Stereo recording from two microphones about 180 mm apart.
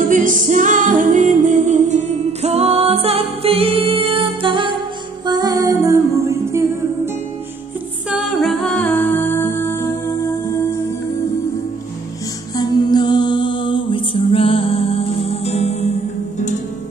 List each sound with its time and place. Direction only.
0.0 s music: 45° right (ahead or behind); by 6.9 s 15° right (ahead or behind)
8.1 s music: 5° right (ahead or behind); by 9.8 s 15° left (ahead or behind)
12.5 s mantra: 20° left (ahead or behind); by 16.5 s 40° left (ahead or behind)